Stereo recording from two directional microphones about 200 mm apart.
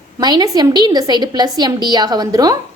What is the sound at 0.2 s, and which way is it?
A woman's voice, 20° right (ahead or behind).